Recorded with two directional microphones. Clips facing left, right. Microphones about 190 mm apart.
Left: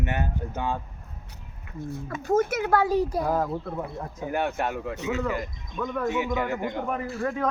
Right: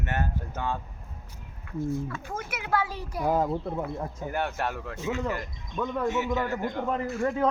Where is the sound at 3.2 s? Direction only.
15° right (ahead or behind).